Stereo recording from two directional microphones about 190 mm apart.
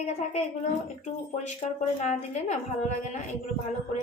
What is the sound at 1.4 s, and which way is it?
A woman's voice, 35° left (ahead or behind).